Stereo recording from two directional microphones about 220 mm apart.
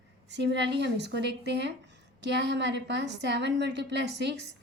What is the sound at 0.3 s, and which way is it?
A woman's voice, 50° right (ahead or behind).